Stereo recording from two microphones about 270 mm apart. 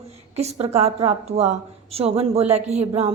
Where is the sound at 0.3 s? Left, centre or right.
Right.